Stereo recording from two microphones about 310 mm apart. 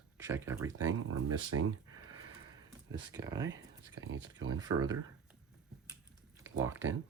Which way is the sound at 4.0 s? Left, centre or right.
Right.